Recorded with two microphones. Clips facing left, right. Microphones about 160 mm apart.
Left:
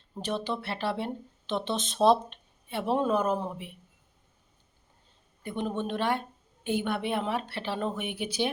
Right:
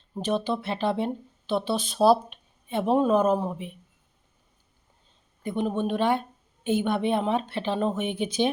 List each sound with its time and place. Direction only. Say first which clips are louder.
0.3 s speech: right 5 dB; 15° right (ahead or behind)
2.6 s a woman's voice: right 5 dB; 20° right (ahead or behind)
5.4 s a woman's voice: right 5 dB; 15° right (ahead or behind)